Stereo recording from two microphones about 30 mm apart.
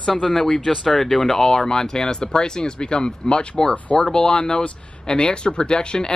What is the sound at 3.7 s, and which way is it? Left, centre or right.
Speech, left.